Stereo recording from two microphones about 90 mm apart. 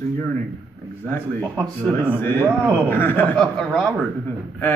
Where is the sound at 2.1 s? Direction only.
25° left (ahead or behind).